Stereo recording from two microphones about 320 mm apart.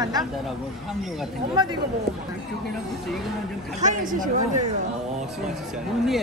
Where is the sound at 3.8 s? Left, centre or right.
Right.